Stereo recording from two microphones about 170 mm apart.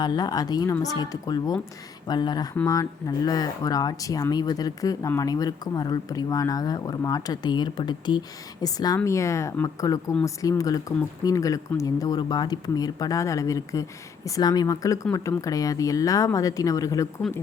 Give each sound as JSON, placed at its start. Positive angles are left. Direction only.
{"t": 0.0, "sound": "speech", "side_deg": 25}